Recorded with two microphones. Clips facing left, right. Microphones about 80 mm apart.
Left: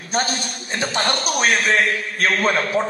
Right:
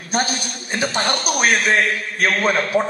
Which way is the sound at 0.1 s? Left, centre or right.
Centre.